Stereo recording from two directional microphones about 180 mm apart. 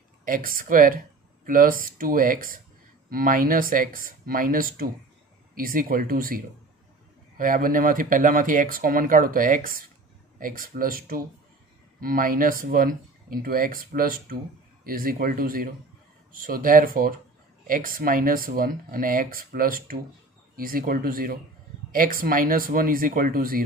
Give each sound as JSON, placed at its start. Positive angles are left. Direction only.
{"t": 0.2, "sound": "speech", "side_deg": -50}